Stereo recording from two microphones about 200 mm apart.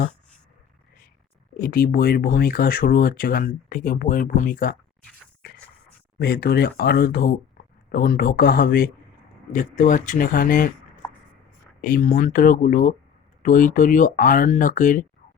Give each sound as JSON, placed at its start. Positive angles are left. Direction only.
{"t": 1.5, "sound": "speech", "side_deg": 50}
{"t": 6.2, "sound": "speech", "side_deg": 50}
{"t": 11.8, "sound": "speech", "side_deg": 45}